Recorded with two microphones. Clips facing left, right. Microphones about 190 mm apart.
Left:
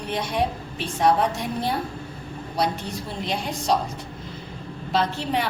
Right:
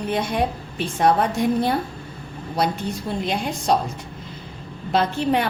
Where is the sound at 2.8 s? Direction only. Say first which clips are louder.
Right 4 dB; 55° right (ahead or behind).